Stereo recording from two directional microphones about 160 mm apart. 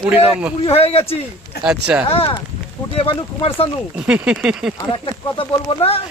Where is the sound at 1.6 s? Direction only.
5° right (ahead or behind).